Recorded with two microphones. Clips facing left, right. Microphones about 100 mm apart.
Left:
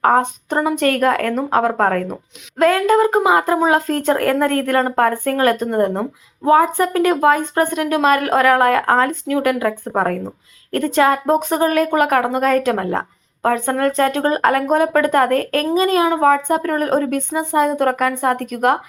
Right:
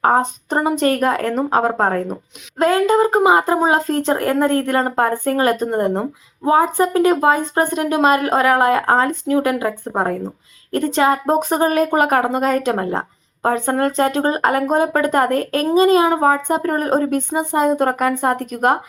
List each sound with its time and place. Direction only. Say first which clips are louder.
0.2 s a woman's voice: even; 30° right (ahead or behind)
11.3 s speech: even; 35° right (ahead or behind)